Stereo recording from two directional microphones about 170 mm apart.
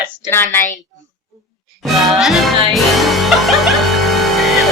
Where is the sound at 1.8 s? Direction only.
Centre (ahead or behind).